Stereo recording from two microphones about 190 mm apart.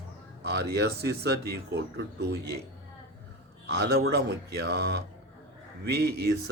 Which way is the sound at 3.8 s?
60° right (ahead or behind).